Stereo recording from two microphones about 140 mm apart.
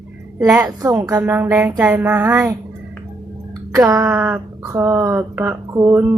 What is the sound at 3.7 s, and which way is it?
Speech, 25° right (ahead or behind).